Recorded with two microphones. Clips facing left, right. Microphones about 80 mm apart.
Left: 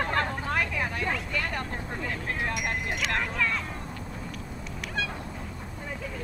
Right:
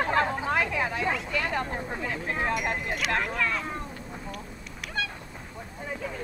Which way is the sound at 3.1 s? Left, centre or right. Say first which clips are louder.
Right 1 dB; centre.